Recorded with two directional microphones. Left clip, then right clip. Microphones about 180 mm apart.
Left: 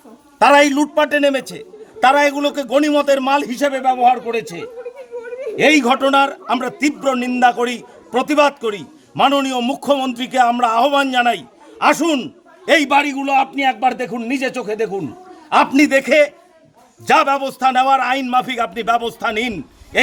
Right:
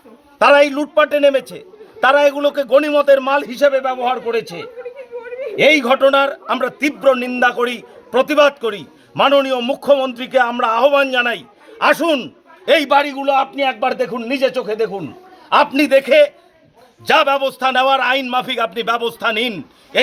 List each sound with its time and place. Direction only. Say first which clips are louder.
0.3 s a man's voice: even; 10° left (ahead or behind)
4.4 s a man's voice: even; 45° left (ahead or behind)
5.5 s a man's voice: right 1 dB; 5° left (ahead or behind)